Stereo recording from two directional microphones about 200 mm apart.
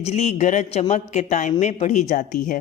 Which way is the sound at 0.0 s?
30° left (ahead or behind).